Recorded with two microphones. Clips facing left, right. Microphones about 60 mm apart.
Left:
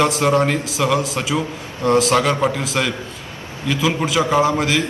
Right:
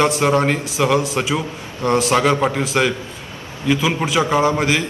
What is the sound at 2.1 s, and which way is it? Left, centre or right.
Speech, centre.